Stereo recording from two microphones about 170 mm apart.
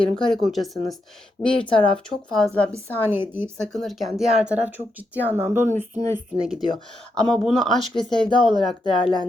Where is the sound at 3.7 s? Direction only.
Centre (ahead or behind).